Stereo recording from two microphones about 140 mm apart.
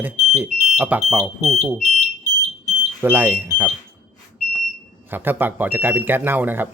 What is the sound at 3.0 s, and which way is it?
Speech, 15° right (ahead or behind).